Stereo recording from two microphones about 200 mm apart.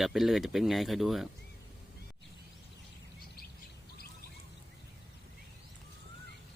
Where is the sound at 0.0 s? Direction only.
Centre (ahead or behind).